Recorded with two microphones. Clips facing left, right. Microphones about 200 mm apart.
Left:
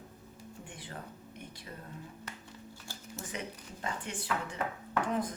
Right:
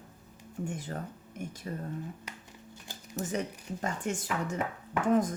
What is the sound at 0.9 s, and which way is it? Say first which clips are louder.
Speech: right 6 dB; 45° right (ahead or behind).